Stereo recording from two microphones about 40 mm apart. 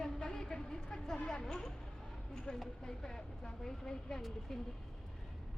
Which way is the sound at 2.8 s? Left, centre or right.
Centre.